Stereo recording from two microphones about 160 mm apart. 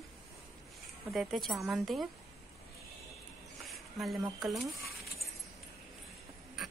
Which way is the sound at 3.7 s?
Centre (ahead or behind).